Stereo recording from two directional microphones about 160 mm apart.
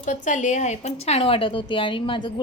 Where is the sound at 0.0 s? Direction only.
50° left (ahead or behind).